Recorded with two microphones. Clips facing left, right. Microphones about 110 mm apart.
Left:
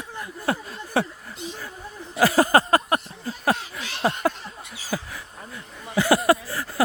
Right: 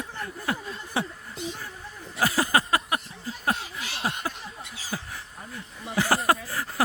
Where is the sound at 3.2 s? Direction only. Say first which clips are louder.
Left 4 dB; 75° left (ahead or behind).